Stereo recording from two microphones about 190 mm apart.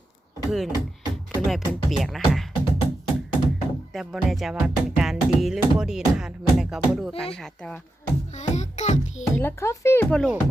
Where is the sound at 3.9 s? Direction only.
Centre (ahead or behind).